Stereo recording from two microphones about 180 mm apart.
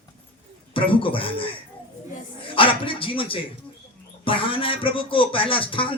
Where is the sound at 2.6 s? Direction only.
30° left (ahead or behind).